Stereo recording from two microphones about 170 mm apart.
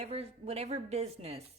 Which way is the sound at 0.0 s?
35° right (ahead or behind).